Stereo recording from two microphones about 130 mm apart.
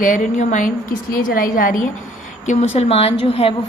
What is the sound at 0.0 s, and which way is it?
A woman's voice, 85° left.